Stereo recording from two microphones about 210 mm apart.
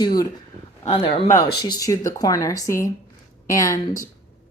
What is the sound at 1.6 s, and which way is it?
A woman's voice, 20° left (ahead or behind).